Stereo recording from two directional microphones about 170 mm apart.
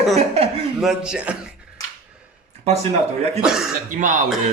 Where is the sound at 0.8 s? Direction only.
5° right (ahead or behind).